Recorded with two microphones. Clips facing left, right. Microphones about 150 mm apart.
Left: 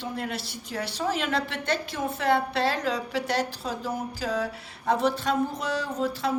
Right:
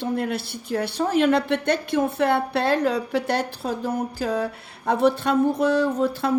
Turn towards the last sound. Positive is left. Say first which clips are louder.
# right 6 dB
turn(degrees=-55)  # may be behind; listen again after turning